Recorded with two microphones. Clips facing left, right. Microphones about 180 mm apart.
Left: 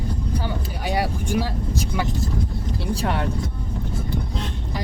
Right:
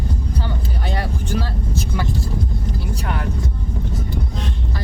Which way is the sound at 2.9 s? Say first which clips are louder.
Left 5 dB; 30° left (ahead or behind).